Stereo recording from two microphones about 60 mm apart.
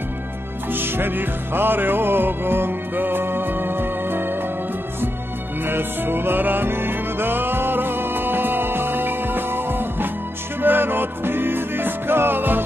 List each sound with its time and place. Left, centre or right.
0.7 s music: right
5.7 s music: right